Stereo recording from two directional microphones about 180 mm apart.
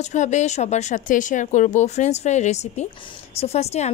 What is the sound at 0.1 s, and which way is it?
A woman's voice, 40° left (ahead or behind).